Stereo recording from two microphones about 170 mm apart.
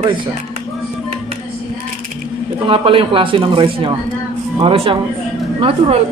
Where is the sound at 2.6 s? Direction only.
30° right (ahead or behind).